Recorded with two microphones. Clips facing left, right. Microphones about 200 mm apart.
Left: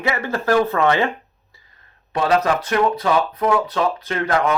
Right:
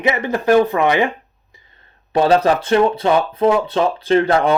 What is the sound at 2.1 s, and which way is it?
Speech, 30° right (ahead or behind).